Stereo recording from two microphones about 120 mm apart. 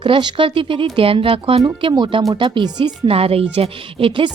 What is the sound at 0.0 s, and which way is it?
A woman's voice, 40° right (ahead or behind).